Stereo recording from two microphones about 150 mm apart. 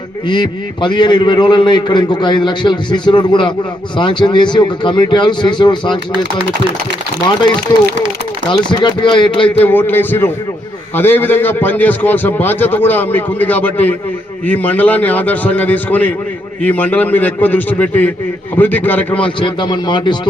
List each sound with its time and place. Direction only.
0.3 s a man's voice: 30° left (ahead or behind)
8.4 s a man's voice: 30° left (ahead or behind)
9.6 s a man's voice: 15° left (ahead or behind)
19.4 s a man's voice: 30° left (ahead or behind)